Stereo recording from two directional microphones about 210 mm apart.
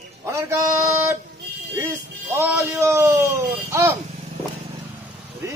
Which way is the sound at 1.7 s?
10° right (ahead or behind).